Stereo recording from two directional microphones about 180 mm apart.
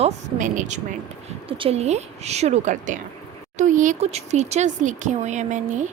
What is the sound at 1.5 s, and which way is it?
A woman's voice, 30° right (ahead or behind).